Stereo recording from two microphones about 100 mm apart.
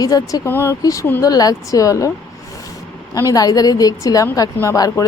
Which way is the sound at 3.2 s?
35° left (ahead or behind).